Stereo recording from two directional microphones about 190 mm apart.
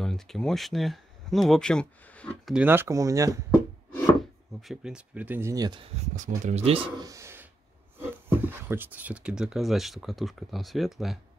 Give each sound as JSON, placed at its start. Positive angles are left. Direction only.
{"t": 0.0, "sound": "speech", "side_deg": 5}
{"t": 2.5, "sound": "speech", "side_deg": -10}
{"t": 4.6, "sound": "speech", "side_deg": 0}
{"t": 6.1, "sound": "speech", "side_deg": -40}